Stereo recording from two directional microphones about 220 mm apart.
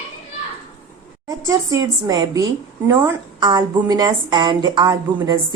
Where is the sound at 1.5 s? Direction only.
15° right (ahead or behind).